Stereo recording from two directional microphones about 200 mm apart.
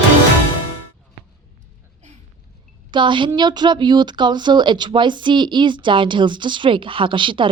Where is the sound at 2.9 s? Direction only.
25° right (ahead or behind).